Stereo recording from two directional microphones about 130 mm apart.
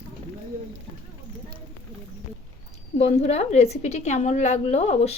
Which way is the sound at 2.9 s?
55° left (ahead or behind).